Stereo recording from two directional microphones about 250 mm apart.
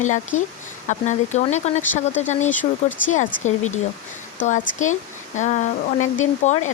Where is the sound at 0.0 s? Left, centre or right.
Left.